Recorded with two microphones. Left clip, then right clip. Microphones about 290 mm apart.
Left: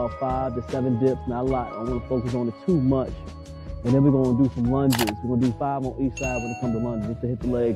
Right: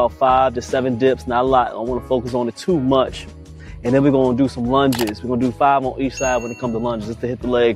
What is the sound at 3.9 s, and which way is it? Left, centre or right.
Speech, centre.